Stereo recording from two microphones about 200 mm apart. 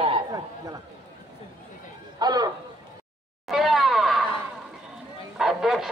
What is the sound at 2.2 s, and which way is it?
Speech, 20° right (ahead or behind).